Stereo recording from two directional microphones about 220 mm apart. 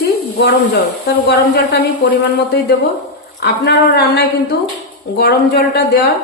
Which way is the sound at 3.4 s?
50° left (ahead or behind).